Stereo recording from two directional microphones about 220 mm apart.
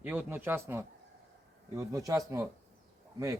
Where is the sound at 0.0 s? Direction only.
10° right (ahead or behind).